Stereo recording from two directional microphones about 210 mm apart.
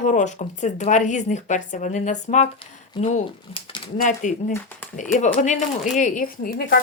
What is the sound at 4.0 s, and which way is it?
A woman's voice, 35° left (ahead or behind).